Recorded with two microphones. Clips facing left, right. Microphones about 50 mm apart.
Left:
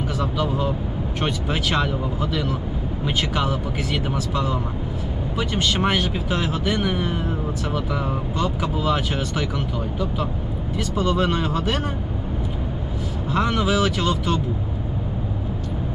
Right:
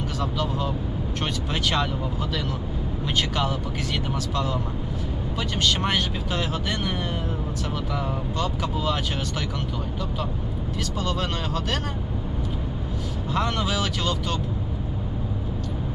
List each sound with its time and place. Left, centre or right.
0.2 s speech: centre
3.2 s speech: centre
10.8 s speech: centre
13.3 s speech: centre